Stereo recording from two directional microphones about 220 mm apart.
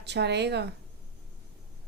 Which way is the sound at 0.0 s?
50° right (ahead or behind).